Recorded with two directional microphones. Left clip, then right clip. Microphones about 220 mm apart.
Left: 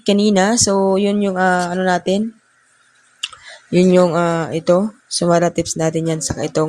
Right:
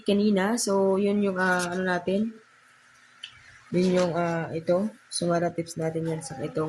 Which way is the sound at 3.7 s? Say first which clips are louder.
Left 11 dB; 40° left (ahead or behind).